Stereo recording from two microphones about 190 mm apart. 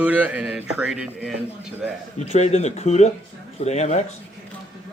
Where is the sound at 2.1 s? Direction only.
35° left (ahead or behind).